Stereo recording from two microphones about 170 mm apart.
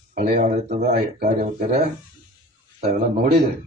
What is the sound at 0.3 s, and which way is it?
A man's voice, 45° right (ahead or behind).